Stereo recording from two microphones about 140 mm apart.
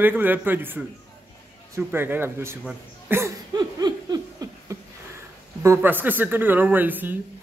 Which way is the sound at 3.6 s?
30° right (ahead or behind).